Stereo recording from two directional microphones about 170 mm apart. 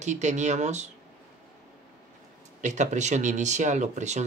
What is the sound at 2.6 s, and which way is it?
Speech, 45° right (ahead or behind).